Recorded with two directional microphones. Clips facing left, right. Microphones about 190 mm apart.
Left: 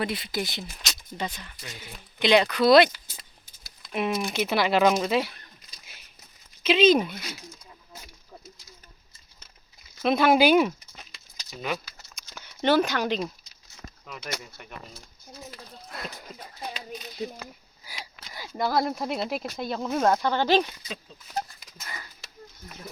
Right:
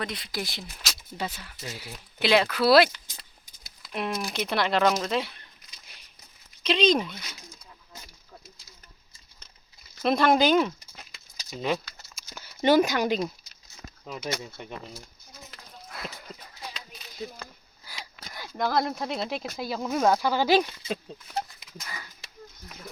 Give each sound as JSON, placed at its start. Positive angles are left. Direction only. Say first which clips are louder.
{"t": 0.0, "sound": "speech", "louder": "left 4 dB", "side_deg": 5}
{"t": 6.6, "sound": "speech", "louder": "left 4 dB", "side_deg": 5}
{"t": 10.0, "sound": "speech", "louder": "left 2 dB", "side_deg": 5}
{"t": 11.5, "sound": "speech", "louder": "right 3 dB", "side_deg": -25}
{"t": 12.1, "sound": "a sound", "louder": "right 1 dB", "side_deg": -5}
{"t": 14.0, "sound": "speech", "louder": "right 4 dB", "side_deg": -25}
{"t": 15.9, "sound": "a sound", "louder": "left 1 dB", "side_deg": 0}
{"t": 17.4, "sound": "sniff", "louder": "left 2 dB", "side_deg": 10}
{"t": 18.3, "sound": "speech", "louder": "left 1 dB", "side_deg": 5}